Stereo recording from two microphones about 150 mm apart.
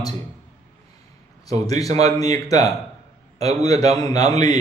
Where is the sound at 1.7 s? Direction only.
25° left (ahead or behind).